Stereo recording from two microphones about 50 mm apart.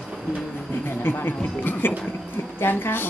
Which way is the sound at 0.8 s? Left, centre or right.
Left.